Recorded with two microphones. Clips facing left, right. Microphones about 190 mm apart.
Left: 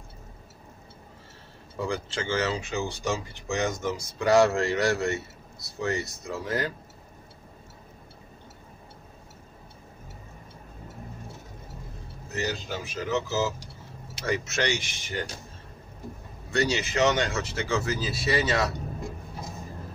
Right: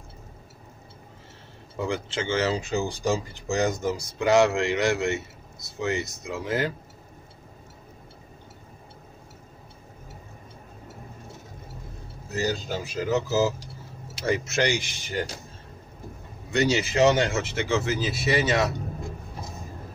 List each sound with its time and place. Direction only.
1.8 s speech: 25° right (ahead or behind)
4.2 s a man's voice: 20° right (ahead or behind)
12.4 s speech: 35° right (ahead or behind)
16.5 s a man's voice: 25° right (ahead or behind)